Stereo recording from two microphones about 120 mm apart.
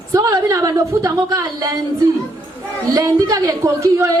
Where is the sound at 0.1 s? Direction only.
25° right (ahead or behind).